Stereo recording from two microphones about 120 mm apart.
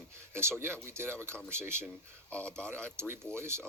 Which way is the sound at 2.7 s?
20° right (ahead or behind).